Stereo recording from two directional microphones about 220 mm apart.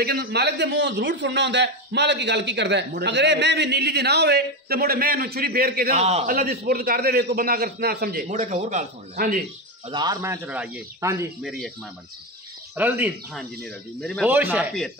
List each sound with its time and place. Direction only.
0.0 s speech: 45° right (ahead or behind)
5.9 s a man's voice: 30° right (ahead or behind)
9.8 s a man's voice: 20° right (ahead or behind)
11.4 s speech: centre (ahead or behind)
12.7 s a man's voice: 10° right (ahead or behind)
13.4 s speech: centre (ahead or behind)
14.3 s a man's voice: 10° right (ahead or behind)